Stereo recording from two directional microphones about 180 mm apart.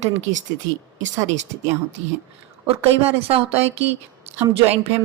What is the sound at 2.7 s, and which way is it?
A woman's voice, 35° right (ahead or behind).